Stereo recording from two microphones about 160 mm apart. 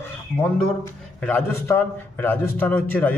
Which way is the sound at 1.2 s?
15° left (ahead or behind).